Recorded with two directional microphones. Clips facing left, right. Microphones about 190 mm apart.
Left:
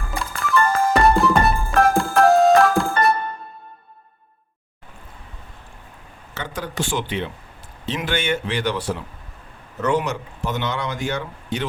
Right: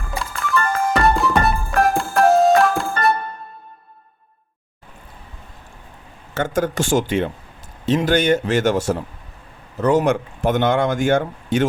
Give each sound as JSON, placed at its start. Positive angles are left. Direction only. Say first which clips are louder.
{"t": 0.1, "sound": "music", "louder": "even", "side_deg": 0}
{"t": 6.3, "sound": "speech", "louder": "right 8 dB", "side_deg": -45}